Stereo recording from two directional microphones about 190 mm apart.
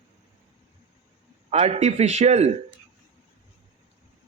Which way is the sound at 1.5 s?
35° right (ahead or behind).